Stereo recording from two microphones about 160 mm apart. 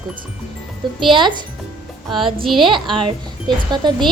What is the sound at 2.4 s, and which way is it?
Speech, centre (ahead or behind).